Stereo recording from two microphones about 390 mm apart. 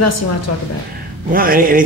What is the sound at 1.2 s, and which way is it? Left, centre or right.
Speech, right.